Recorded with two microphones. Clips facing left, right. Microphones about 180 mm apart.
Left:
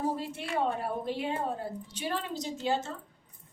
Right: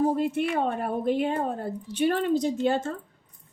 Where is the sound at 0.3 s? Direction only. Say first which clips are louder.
Right 5 dB; 55° right (ahead or behind).